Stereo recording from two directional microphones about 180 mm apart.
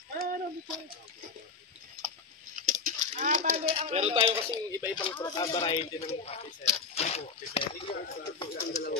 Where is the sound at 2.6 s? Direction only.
45° right (ahead or behind).